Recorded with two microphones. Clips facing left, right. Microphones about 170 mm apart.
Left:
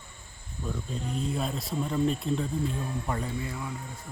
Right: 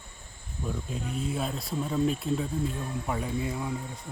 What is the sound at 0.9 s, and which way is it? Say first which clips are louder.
Speech: left 2 dB; 5° right (ahead or behind).